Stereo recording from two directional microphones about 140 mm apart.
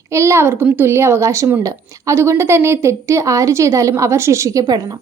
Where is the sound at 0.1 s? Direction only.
20° right (ahead or behind).